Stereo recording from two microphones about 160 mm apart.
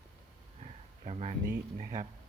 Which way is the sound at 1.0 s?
45° right (ahead or behind).